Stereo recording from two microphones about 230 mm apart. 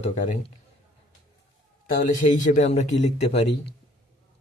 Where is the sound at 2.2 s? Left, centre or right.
Left.